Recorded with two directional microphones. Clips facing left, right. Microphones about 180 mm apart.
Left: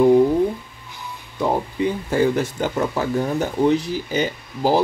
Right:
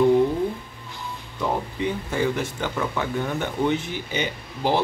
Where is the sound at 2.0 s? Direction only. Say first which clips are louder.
Left 8 dB; 40° left (ahead or behind).